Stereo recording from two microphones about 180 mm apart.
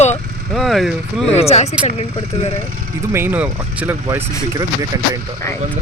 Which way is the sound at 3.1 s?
10° right (ahead or behind).